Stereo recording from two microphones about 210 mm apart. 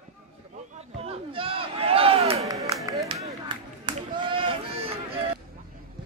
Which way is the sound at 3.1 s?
20° right (ahead or behind).